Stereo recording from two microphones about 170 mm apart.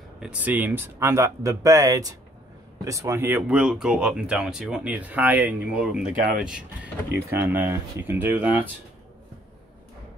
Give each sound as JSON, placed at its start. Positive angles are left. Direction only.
{"t": 0.2, "sound": "speech", "side_deg": -10}